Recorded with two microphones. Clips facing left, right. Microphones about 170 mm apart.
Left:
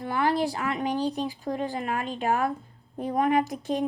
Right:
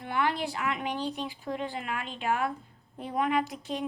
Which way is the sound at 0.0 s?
40° left (ahead or behind).